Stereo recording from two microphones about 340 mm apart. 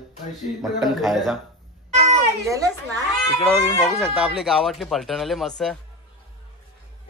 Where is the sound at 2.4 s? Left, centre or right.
Centre.